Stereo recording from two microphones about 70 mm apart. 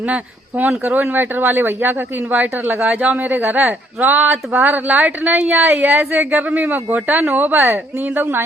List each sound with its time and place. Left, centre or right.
0.0 s a woman's voice: right